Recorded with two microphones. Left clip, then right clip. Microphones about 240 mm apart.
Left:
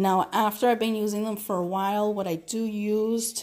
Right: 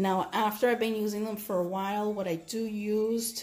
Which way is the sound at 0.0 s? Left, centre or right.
Left.